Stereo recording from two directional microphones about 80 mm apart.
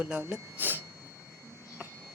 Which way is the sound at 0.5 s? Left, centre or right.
Right.